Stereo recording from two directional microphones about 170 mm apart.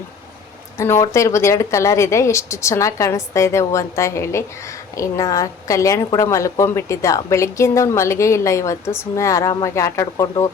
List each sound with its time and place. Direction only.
0.8 s a woman's voice: 15° left (ahead or behind)